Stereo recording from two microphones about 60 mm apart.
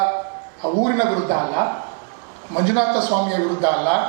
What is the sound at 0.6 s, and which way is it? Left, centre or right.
A man's voice, right.